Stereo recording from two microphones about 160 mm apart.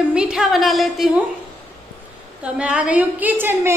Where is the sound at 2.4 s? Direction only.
10° right (ahead or behind).